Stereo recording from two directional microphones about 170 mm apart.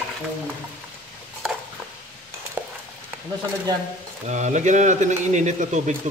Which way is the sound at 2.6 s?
10° right (ahead or behind).